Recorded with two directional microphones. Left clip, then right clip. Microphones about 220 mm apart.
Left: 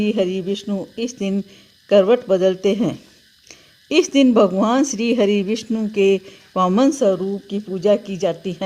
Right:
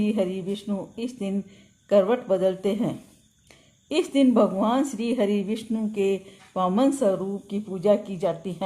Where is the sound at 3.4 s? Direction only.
45° left (ahead or behind).